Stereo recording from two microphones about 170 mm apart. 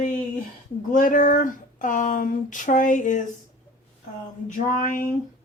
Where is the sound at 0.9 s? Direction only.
50° left (ahead or behind).